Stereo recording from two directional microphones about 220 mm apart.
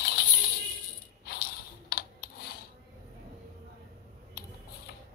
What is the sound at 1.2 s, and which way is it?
Coin, 45° left (ahead or behind).